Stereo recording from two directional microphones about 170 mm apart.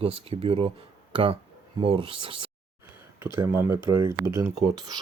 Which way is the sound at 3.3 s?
15° right (ahead or behind).